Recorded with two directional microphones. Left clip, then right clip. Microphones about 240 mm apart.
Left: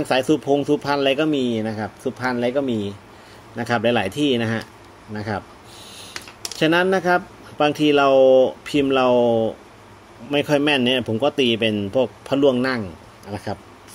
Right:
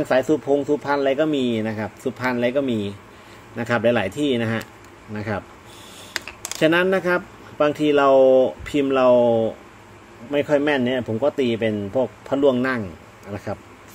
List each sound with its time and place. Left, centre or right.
0.0 s a man's voice: centre
6.6 s a man's voice: centre